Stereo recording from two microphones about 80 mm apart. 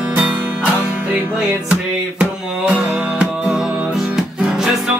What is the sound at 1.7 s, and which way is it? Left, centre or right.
Music, centre.